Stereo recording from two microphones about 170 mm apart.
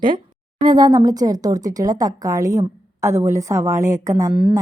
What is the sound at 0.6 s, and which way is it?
A woman's voice, 25° right (ahead or behind).